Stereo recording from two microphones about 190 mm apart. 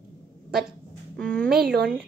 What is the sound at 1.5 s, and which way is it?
Speech, 55° right (ahead or behind).